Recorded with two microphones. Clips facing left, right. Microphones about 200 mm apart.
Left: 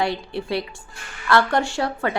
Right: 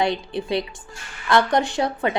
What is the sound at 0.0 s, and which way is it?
A woman's voice, 20° right (ahead or behind).